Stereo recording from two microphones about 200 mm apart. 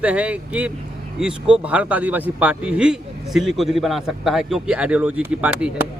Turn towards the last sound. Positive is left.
turn(degrees=-5)  # may be behind; listen again after turning